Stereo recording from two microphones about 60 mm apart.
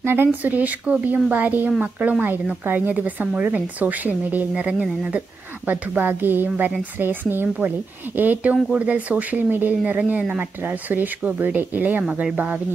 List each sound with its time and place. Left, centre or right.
0.0 s speech: right; by 5.2 s centre
5.7 s speech: right
12.0 s speech: centre